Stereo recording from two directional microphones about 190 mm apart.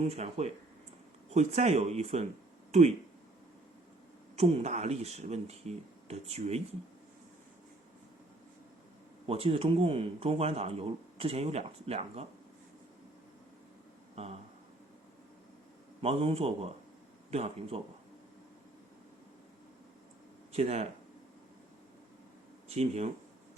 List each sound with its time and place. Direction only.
0.0 s speech: 35° right (ahead or behind)
4.4 s speech: 30° right (ahead or behind)
9.2 s speech: 30° right (ahead or behind)
14.2 s speech: 35° right (ahead or behind)
16.0 s speech: 30° right (ahead or behind)
20.5 s speech: 35° right (ahead or behind)
22.7 s speech: 35° right (ahead or behind)